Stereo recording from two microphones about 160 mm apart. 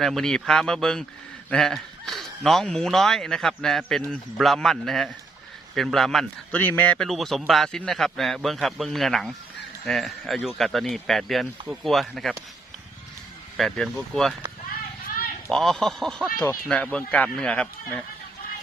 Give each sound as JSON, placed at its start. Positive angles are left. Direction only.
{"t": 0.0, "sound": "speech", "side_deg": 0}
{"t": 13.6, "sound": "speech", "side_deg": 0}
{"t": 15.0, "sound": "a sound", "side_deg": 65}
{"t": 15.4, "sound": "speech", "side_deg": 0}